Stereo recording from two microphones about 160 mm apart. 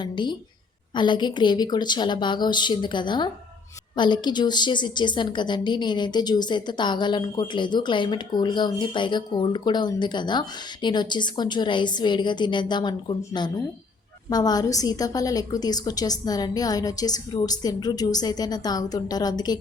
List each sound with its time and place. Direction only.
0.0 s a woman's voice: 30° left (ahead or behind)